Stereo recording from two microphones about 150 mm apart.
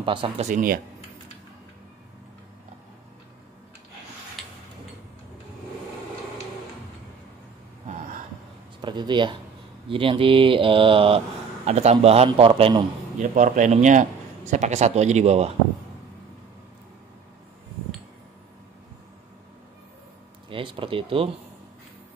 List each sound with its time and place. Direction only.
0.0 s speech: 35° right (ahead or behind)
0.5 s speech: 65° right (ahead or behind)
4.4 s tick-tock: centre (ahead or behind)
8.8 s speech: 30° right (ahead or behind)
13.2 s speech: 60° right (ahead or behind)
20.4 s speech: 35° right (ahead or behind)